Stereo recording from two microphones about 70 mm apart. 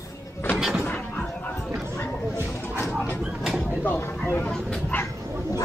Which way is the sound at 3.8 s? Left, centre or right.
Left.